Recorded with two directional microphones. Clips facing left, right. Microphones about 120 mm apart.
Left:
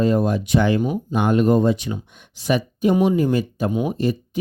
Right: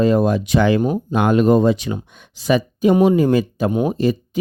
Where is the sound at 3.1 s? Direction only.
90° right.